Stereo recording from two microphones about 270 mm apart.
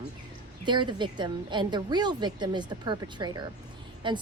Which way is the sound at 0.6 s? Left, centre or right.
Centre.